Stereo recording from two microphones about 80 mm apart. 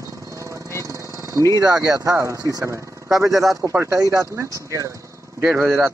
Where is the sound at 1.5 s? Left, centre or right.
Right.